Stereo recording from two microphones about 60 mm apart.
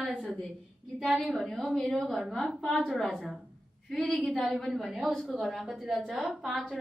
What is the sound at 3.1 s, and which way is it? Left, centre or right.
A woman's voice, centre.